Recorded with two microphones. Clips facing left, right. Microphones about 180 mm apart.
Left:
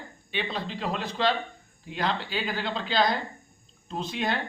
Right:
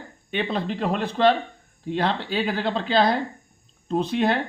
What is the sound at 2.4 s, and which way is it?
Speech, 60° right (ahead or behind).